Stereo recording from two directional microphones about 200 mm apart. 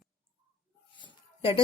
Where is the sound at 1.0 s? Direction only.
25° left (ahead or behind).